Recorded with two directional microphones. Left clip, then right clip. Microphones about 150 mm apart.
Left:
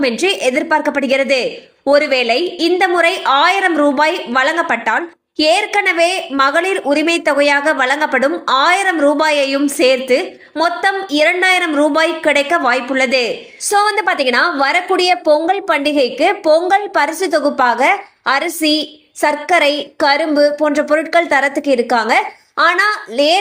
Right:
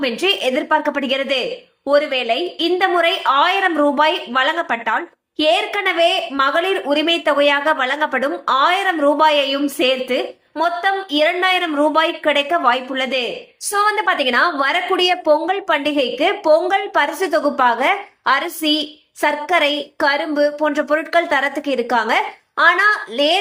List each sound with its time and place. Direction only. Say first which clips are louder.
0.0 s a woman's voice: left 3 dB; 25° left (ahead or behind)